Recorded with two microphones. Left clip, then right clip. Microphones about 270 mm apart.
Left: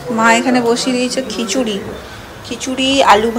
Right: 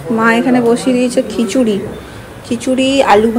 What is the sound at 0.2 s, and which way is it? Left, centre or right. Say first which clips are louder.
A woman's voice: even; centre.